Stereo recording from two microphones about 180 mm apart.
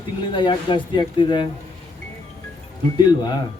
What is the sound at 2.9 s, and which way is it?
Speech, 25° left (ahead or behind).